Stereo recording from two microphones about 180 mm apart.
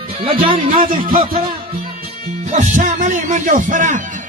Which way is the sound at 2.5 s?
45° right (ahead or behind).